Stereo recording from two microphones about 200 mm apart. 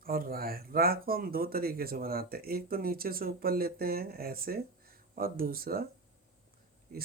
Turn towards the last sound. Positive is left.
turn(degrees=-50)  # may be behind; listen again after turning